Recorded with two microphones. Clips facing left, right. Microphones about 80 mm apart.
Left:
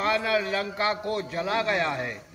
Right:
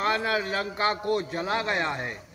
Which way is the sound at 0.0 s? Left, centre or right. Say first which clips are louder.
Left 1 dB; right.